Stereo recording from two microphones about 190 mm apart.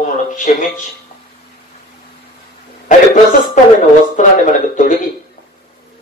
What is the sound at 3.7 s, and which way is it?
Speech, 45° left (ahead or behind).